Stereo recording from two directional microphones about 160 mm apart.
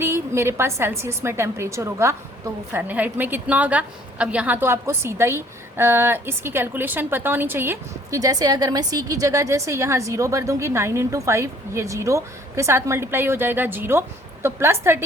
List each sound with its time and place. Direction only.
0.0 s a woman's voice: 15° right (ahead or behind)